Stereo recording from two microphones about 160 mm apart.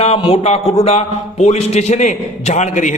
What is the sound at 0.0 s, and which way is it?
A man's voice, 40° left (ahead or behind).